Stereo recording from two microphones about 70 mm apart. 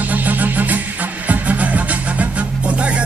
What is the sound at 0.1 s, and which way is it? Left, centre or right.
Music, right.